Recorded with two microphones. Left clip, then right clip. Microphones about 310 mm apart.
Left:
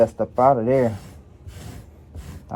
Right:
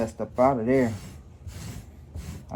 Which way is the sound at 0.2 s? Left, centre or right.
Left.